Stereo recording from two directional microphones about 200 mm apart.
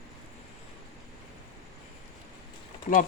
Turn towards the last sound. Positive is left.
turn(degrees=30)  # may be behind; listen again after turning